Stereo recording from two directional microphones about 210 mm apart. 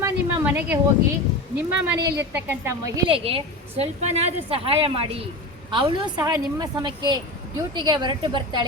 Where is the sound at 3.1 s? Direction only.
25° right (ahead or behind).